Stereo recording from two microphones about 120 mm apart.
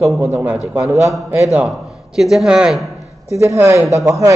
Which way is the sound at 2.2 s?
5° right (ahead or behind).